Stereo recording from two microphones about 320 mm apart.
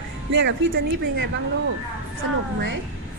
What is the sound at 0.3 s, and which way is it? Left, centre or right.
A woman's voice, right.